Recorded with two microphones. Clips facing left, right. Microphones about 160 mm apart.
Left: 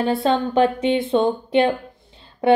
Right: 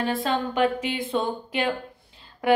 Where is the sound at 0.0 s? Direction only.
25° left (ahead or behind).